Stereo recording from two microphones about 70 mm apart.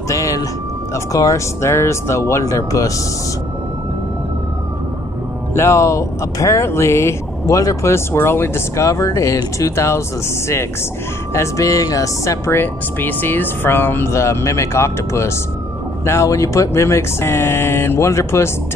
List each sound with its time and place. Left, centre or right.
0.1 s a sound: left
0.9 s speech: left
5.5 s speech: left
11.3 s speech: left
12.4 s speech: left